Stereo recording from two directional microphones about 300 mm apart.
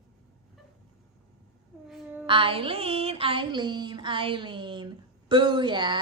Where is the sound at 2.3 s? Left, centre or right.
Centre.